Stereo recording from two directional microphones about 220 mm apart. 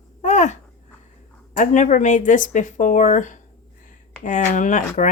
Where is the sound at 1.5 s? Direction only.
35° left (ahead or behind).